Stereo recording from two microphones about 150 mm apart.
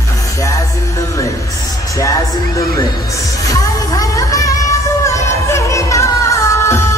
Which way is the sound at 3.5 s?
25° left (ahead or behind).